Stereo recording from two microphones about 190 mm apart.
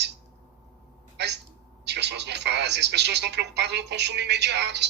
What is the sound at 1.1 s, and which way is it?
Speech, 65° right (ahead or behind).